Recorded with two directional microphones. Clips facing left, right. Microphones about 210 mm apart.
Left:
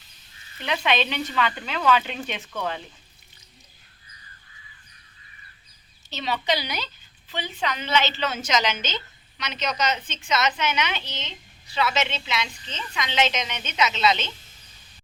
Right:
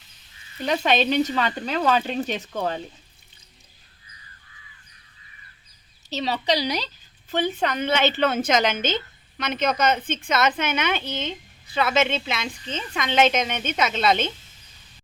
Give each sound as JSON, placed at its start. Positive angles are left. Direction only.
{"t": 0.6, "sound": "speech", "side_deg": -40}
{"t": 6.1, "sound": "a woman's voice", "side_deg": -35}